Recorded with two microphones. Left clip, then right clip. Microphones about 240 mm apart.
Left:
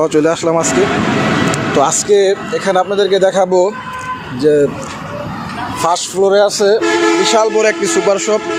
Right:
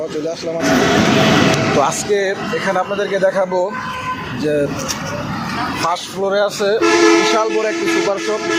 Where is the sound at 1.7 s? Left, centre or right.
Left.